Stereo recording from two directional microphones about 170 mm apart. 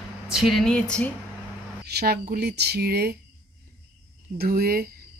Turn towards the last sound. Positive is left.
turn(degrees=-65)  # may be behind; listen again after turning